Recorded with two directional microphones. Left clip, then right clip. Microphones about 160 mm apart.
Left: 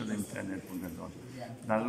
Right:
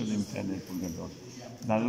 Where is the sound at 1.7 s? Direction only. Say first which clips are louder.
Right 2 dB; 15° right (ahead or behind).